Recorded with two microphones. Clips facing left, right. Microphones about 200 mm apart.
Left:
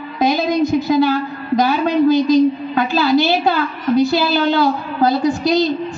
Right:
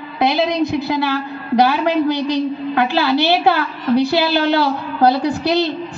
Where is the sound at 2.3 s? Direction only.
65° right (ahead or behind).